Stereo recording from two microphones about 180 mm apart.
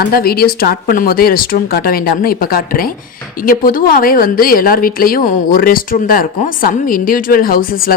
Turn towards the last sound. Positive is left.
turn(degrees=55)  # may be behind; listen again after turning